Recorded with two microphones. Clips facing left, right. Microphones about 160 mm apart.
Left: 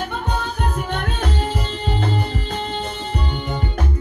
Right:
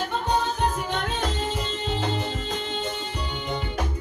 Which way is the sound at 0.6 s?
60° left (ahead or behind).